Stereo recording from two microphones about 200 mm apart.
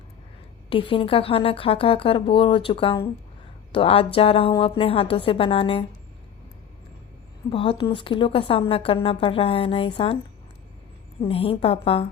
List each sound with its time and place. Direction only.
0.7 s a woman's voice: 25° left (ahead or behind)
7.5 s a woman's voice: 25° left (ahead or behind)
11.2 s a woman's voice: 30° left (ahead or behind)